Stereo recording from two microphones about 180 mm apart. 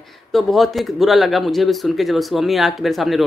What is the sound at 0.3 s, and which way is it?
Speech, centre (ahead or behind).